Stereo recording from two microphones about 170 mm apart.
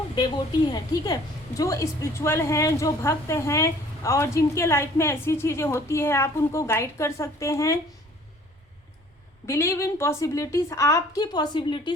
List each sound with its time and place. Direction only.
0.2 s a woman's voice: 25° left (ahead or behind)
9.5 s a woman's voice: 15° left (ahead or behind)